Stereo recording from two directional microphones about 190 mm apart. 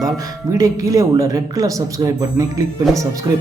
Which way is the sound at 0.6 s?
20° right (ahead or behind).